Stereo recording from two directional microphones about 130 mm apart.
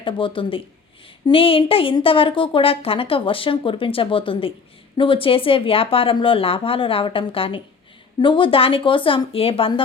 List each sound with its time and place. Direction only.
0.0 s a woman's voice: 40° left (ahead or behind)